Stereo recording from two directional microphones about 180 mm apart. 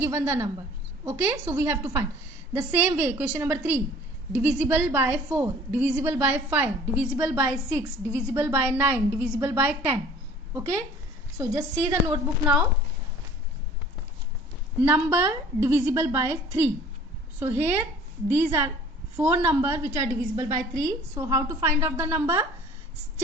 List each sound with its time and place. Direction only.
0.0 s a woman's voice: 15° right (ahead or behind)
14.8 s a woman's voice: 15° right (ahead or behind)